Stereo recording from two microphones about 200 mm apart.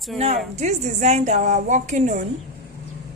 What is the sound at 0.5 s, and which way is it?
A woman's voice, 35° right (ahead or behind).